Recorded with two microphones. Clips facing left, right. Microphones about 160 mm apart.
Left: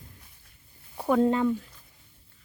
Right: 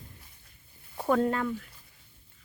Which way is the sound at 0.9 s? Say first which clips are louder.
Left 3 dB; 10° left (ahead or behind).